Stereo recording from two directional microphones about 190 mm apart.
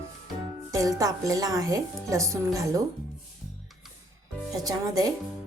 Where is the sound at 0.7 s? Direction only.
15° right (ahead or behind).